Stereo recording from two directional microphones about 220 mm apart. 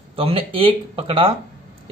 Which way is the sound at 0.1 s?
25° right (ahead or behind).